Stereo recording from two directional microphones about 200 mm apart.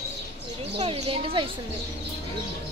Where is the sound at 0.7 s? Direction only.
25° right (ahead or behind).